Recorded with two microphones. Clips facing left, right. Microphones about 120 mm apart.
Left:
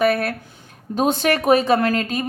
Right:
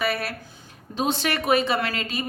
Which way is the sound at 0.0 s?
50° left (ahead or behind).